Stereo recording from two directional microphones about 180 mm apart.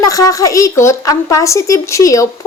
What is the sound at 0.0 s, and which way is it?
A woman's voice, 20° left (ahead or behind).